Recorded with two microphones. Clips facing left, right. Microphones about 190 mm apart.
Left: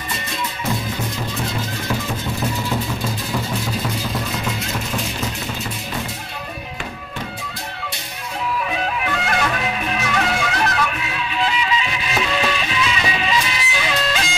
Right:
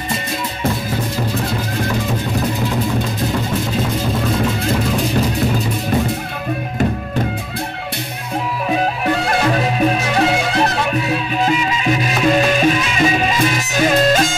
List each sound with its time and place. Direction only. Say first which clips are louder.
8.6 s music: right 6 dB; 35° right (ahead or behind)
11.3 s music: right 1 dB; 45° right (ahead or behind)